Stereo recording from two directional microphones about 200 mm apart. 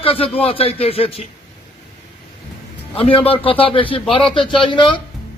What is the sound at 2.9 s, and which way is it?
A man's voice, 30° left (ahead or behind).